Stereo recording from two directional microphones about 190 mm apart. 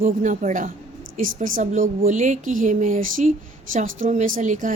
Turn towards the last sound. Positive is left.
turn(degrees=-40)  # may be behind; listen again after turning